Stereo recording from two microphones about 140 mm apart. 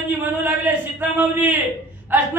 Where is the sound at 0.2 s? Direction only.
15° right (ahead or behind).